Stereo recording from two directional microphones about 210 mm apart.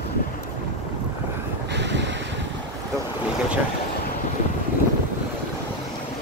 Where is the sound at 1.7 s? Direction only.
55° right (ahead or behind).